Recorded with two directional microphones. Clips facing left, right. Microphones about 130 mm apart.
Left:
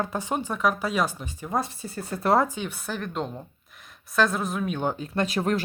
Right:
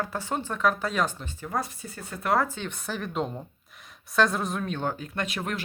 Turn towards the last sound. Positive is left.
turn(degrees=35)  # may be behind; listen again after turning